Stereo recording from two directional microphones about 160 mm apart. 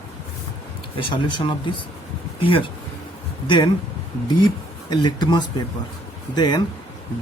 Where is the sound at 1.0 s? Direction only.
30° left (ahead or behind).